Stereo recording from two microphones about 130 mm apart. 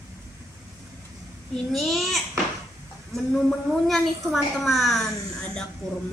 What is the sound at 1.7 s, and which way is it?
Speech, centre (ahead or behind).